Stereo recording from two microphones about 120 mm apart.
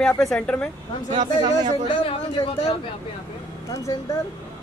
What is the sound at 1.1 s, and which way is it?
Speech, 80° right.